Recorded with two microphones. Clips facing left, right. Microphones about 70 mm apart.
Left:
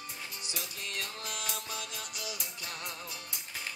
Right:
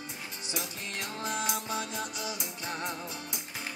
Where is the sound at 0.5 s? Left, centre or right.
Right.